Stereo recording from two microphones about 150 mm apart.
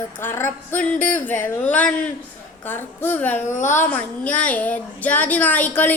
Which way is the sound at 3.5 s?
55° left (ahead or behind).